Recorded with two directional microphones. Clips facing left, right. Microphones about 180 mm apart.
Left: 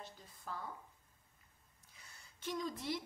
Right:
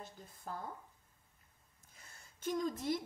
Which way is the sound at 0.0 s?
50° right (ahead or behind).